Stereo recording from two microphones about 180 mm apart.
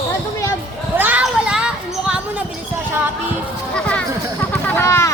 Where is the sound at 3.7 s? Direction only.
5° left (ahead or behind).